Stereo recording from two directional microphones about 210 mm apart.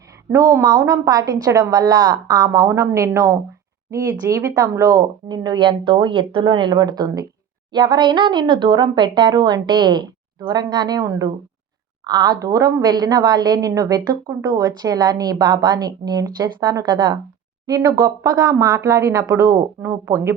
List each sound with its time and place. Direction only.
0.3 s a woman's voice: 15° right (ahead or behind)